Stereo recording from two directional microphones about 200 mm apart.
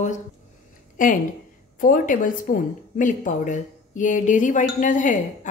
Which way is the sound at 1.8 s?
45° left (ahead or behind).